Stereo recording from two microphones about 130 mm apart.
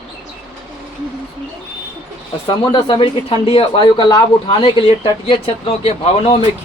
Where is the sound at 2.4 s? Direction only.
40° left (ahead or behind).